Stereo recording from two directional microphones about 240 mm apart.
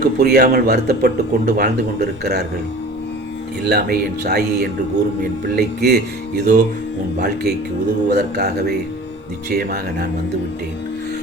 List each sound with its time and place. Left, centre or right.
0.2 s speech: right
3.6 s speech: right